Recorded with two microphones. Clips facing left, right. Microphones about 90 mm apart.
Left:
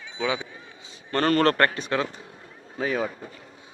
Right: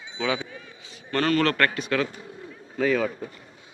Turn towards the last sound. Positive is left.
turn(degrees=25)  # may be behind; listen again after turning